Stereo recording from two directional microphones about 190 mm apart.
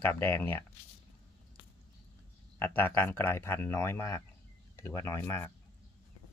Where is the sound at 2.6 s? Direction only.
10° left (ahead or behind).